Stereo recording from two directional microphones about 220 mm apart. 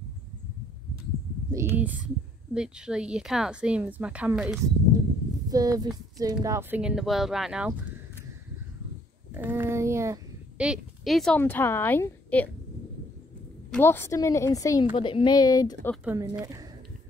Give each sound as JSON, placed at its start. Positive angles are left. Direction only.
{"t": 1.5, "sound": "speech", "side_deg": -10}
{"t": 5.5, "sound": "speech", "side_deg": -15}
{"t": 6.8, "sound": "speech", "side_deg": -5}
{"t": 9.3, "sound": "speech", "side_deg": -10}
{"t": 13.7, "sound": "a woman's voice", "side_deg": 10}
{"t": 16.0, "sound": "speech", "side_deg": -10}